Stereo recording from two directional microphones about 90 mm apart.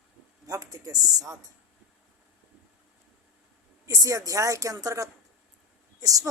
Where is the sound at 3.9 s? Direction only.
35° right (ahead or behind).